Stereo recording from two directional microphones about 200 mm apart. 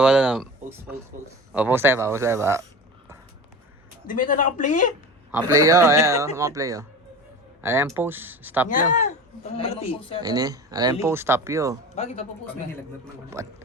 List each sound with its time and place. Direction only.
0.0 s a man's voice: 5° right (ahead or behind)
4.0 s speech: 40° left (ahead or behind)
5.5 s a man's voice: 15° right (ahead or behind)
8.7 s speech: 35° left (ahead or behind)
10.2 s a man's voice: 20° right (ahead or behind)
11.9 s speech: 30° left (ahead or behind)
13.4 s a man's voice: 15° right (ahead or behind)